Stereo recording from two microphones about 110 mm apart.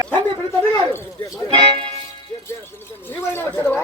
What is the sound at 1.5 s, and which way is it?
Speech, 55° right (ahead or behind).